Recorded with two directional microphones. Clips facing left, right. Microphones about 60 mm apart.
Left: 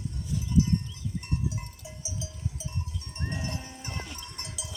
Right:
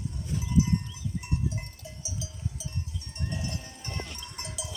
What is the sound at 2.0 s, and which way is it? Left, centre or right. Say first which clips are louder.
Cowbell: left 1 dB; left.